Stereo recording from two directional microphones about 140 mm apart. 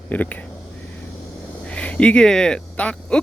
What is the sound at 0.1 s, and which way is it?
Speech, 10° left (ahead or behind).